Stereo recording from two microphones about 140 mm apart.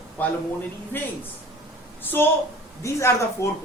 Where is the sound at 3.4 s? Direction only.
20° left (ahead or behind).